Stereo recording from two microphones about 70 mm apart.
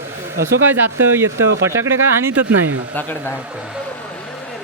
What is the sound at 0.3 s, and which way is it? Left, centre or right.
Speech, right.